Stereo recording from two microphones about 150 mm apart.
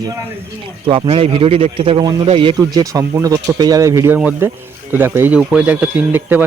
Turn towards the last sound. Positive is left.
turn(degrees=-15)  # may be behind; listen again after turning